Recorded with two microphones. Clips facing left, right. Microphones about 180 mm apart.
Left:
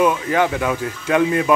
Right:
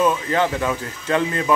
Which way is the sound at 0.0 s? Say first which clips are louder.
Left 2 dB; 10° left (ahead or behind).